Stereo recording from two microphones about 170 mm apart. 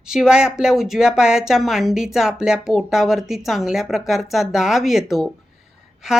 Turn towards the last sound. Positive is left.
turn(degrees=-5)  # may be behind; listen again after turning